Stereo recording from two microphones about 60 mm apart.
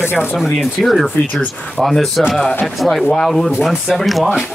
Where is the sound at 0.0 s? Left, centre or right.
Left.